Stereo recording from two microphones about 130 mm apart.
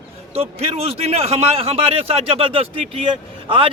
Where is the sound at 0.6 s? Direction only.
50° right (ahead or behind).